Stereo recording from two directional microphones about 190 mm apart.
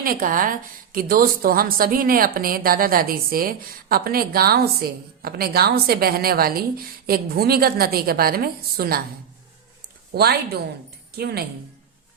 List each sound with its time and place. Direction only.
0.0 s speech: 45° right (ahead or behind)
10.2 s a woman's voice: 55° right (ahead or behind)